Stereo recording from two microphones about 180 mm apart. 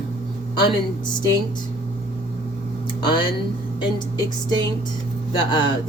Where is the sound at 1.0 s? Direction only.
25° left (ahead or behind).